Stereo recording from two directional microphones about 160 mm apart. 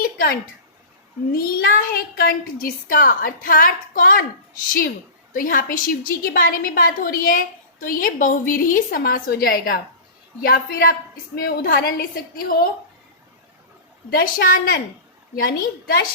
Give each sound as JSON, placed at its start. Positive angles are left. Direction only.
{"t": 0.0, "sound": "a sound", "side_deg": 65}
{"t": 1.3, "sound": "a woman's voice", "side_deg": 70}
{"t": 5.3, "sound": "a woman's voice", "side_deg": 60}
{"t": 14.1, "sound": "a woman's voice", "side_deg": 70}